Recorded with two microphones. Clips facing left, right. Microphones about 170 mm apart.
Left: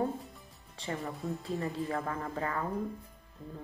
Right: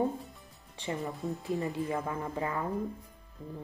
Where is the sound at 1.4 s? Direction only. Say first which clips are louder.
Right 3 dB; 20° right (ahead or behind).